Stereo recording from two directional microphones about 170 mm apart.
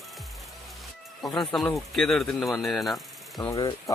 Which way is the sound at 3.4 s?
20° left (ahead or behind).